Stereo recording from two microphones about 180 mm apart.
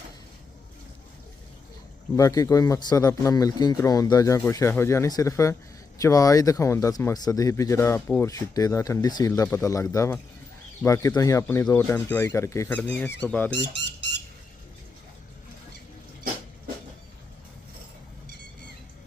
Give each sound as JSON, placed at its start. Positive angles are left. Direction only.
{"t": 2.1, "sound": "speech", "side_deg": 20}
{"t": 13.5, "sound": "speech", "side_deg": 80}